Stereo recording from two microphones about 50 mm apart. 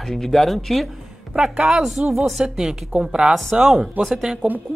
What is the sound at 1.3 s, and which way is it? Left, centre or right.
Speech, centre.